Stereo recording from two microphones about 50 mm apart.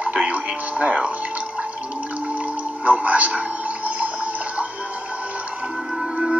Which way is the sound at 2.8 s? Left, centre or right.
Right.